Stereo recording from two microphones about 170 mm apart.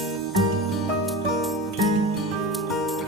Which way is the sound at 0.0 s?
Centre (ahead or behind).